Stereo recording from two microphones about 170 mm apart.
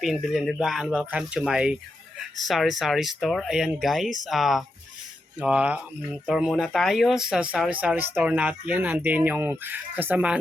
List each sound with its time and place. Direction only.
0.0 s speech: centre (ahead or behind)